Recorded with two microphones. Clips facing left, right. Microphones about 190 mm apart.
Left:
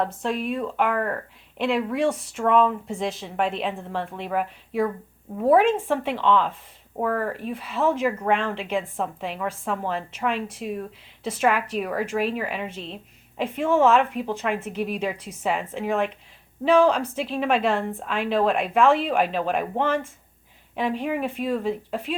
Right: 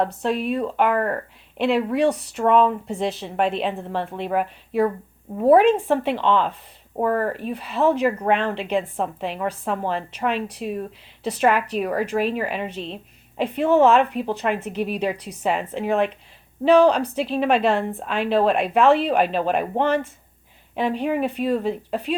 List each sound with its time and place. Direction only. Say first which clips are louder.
0.2 s speech: right 3 dB; 30° right (ahead or behind)